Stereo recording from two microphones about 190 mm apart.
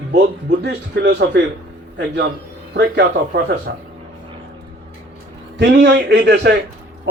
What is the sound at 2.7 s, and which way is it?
Speech, 65° right (ahead or behind).